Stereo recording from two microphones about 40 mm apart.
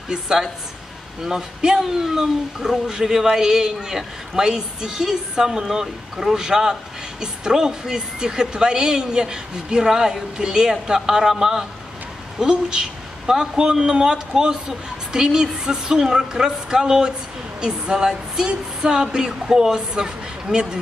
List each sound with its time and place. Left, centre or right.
0.1 s speech: centre